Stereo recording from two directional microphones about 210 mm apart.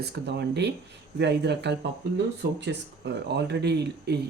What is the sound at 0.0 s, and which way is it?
Speech, 50° right (ahead or behind).